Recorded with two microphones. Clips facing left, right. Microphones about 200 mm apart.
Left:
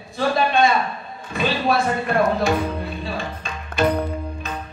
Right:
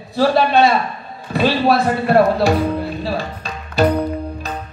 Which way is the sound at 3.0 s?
35° right (ahead or behind).